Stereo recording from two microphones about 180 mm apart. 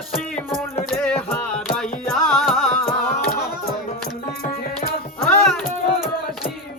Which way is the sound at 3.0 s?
55° left (ahead or behind).